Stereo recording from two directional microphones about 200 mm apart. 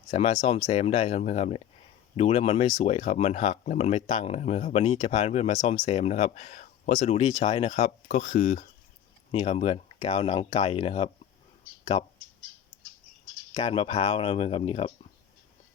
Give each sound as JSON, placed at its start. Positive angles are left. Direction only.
{"t": 0.1, "sound": "speech", "side_deg": 30}
{"t": 13.5, "sound": "speech", "side_deg": 30}